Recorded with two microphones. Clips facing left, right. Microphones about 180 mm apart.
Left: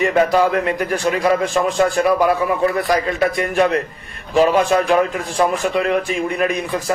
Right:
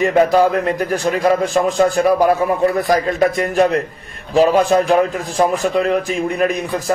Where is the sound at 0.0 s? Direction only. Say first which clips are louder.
Right 2 dB; 40° right (ahead or behind).